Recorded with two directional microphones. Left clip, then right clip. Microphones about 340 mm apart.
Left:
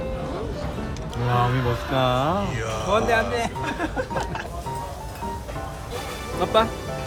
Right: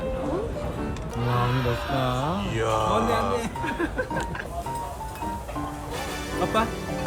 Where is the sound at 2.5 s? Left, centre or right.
Centre.